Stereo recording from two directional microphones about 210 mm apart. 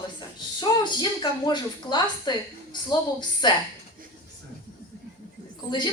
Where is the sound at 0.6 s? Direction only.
20° left (ahead or behind).